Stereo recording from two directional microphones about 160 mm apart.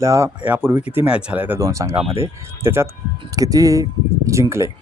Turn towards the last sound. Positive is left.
turn(degrees=-20)  # may be behind; listen again after turning